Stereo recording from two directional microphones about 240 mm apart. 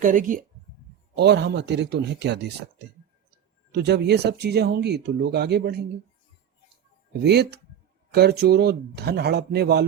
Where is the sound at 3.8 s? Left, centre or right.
Right.